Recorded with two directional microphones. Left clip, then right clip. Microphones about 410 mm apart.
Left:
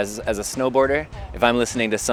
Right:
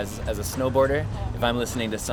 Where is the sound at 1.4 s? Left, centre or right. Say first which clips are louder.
Left 7 dB; left.